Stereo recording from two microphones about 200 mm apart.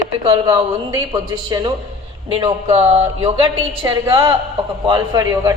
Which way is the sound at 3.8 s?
20° right (ahead or behind).